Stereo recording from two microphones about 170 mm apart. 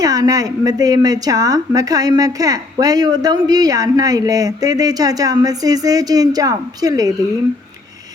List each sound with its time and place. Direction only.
0.0 s a woman's voice: 20° right (ahead or behind)